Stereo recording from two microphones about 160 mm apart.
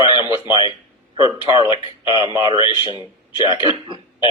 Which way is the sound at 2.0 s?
30° left (ahead or behind).